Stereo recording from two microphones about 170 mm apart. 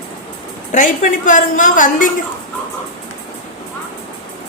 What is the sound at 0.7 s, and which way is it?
A woman's voice, 50° left (ahead or behind).